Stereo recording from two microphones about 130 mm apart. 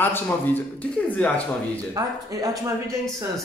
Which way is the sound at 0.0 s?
15° left (ahead or behind).